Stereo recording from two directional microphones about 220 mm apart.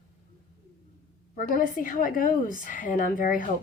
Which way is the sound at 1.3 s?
40° left (ahead or behind).